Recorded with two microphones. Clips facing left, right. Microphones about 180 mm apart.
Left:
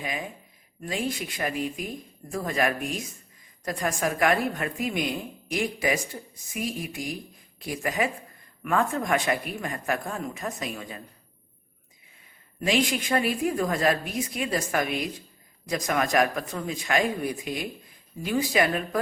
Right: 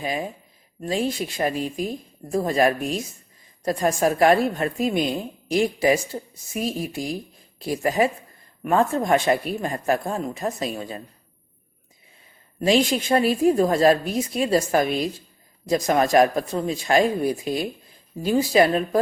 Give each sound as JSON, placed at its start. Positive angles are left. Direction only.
{"t": 0.0, "sound": "speech", "side_deg": -30}
{"t": 12.5, "sound": "speech", "side_deg": -30}